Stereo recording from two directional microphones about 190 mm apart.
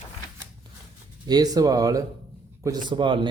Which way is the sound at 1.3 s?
20° right (ahead or behind).